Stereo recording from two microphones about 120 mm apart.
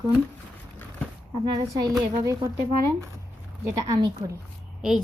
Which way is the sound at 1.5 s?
30° right (ahead or behind).